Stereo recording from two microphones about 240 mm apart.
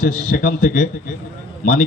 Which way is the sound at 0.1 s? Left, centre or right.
Left.